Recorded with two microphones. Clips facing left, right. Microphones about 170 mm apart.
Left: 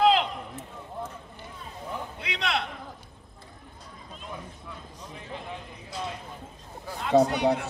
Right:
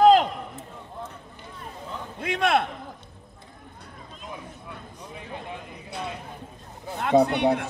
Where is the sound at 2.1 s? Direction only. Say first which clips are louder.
Right 9 dB; 50° right (ahead or behind).